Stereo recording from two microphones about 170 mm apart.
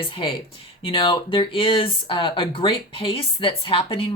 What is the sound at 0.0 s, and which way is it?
Speech, 30° left (ahead or behind).